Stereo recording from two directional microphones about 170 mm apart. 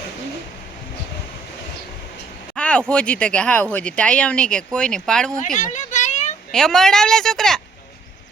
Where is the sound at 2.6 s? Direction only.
5° left (ahead or behind).